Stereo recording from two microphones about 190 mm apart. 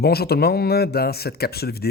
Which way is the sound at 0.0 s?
55° left (ahead or behind).